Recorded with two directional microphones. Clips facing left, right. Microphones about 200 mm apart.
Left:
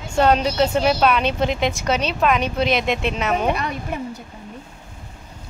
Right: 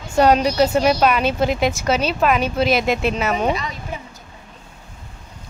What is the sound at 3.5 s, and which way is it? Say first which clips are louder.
Speech: left 1 dB; 60° left (ahead or behind).